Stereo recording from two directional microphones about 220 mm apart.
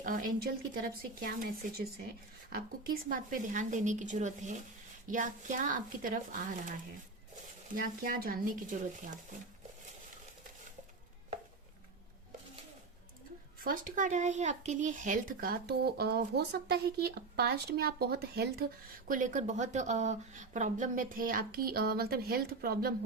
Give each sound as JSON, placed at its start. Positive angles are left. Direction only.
{"t": 0.0, "sound": "speech", "side_deg": -40}
{"t": 8.0, "sound": "speech", "side_deg": -40}
{"t": 13.7, "sound": "a child's voice", "side_deg": -35}